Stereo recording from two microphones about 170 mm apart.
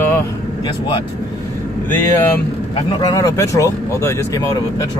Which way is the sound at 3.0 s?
20° left (ahead or behind).